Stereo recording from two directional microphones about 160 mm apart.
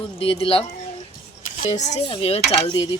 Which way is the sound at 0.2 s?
35° left (ahead or behind).